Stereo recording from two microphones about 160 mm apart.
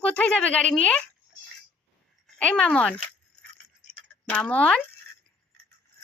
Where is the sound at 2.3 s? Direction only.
5° left (ahead or behind).